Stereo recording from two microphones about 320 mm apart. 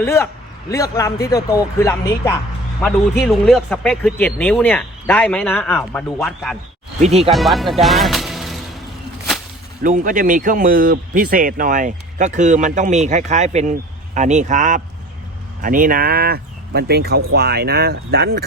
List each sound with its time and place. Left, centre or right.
0.0 s a man's voice: centre
7.0 s speech: centre
7.3 s speech: centre
9.8 s speech: right